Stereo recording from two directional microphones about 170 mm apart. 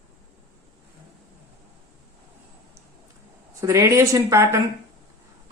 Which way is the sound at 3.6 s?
15° right (ahead or behind).